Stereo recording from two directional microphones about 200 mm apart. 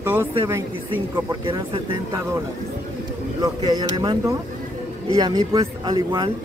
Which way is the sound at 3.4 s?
20° right (ahead or behind).